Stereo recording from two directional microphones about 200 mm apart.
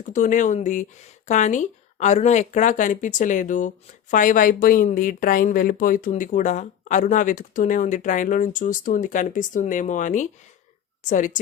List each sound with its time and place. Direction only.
0.0 s a woman's voice: 40° left (ahead or behind)